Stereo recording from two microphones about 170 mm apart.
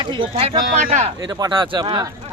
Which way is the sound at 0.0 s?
30° right (ahead or behind).